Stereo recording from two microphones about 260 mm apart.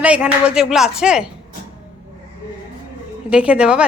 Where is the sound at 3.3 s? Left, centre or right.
Centre.